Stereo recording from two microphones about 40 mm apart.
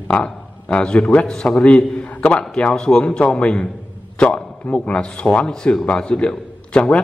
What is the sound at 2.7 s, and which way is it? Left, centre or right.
A man's voice, left.